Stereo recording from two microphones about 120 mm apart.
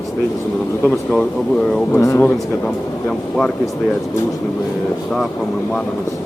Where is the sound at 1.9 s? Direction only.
25° left (ahead or behind).